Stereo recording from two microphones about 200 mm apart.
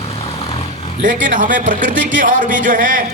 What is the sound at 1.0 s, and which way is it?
A man's voice, 40° right (ahead or behind).